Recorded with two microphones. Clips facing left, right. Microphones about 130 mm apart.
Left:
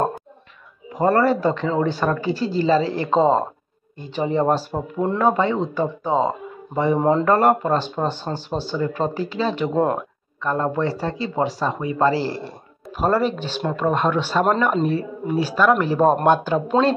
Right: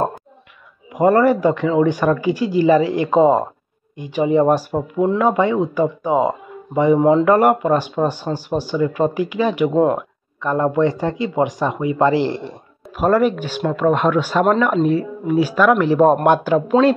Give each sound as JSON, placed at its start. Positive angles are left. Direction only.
{"t": 0.9, "sound": "speech", "side_deg": -15}